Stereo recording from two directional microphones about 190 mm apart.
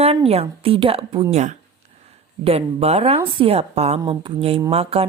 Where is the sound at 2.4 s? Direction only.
30° right (ahead or behind).